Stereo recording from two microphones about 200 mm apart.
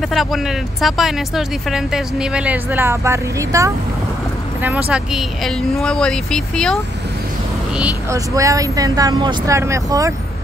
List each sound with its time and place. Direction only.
0.1 s speech: centre (ahead or behind)
7.7 s speech: 10° right (ahead or behind)